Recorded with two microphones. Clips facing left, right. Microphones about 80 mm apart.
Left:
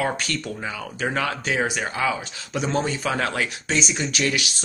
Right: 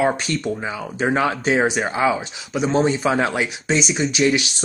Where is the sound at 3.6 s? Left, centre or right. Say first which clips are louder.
Right 7 dB; centre.